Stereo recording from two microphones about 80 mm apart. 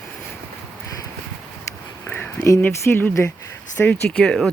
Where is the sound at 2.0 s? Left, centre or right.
Left.